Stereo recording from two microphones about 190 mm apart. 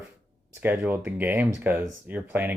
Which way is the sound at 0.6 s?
10° right (ahead or behind).